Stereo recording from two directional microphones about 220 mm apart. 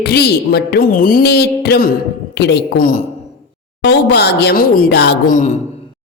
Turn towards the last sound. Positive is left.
turn(degrees=50)  # may be behind; listen again after turning